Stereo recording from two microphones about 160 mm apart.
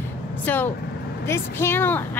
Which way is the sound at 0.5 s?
10° left (ahead or behind).